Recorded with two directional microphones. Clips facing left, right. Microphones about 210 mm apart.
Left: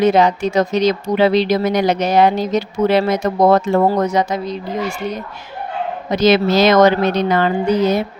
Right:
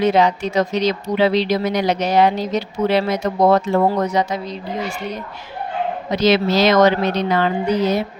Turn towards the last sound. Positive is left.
turn(degrees=50)  # may be behind; listen again after turning